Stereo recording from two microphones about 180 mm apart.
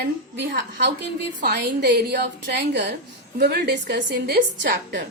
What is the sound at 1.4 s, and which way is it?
A woman's voice, 65° right (ahead or behind).